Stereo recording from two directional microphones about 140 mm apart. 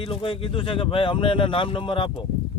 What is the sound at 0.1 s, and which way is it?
Speech, 40° left (ahead or behind).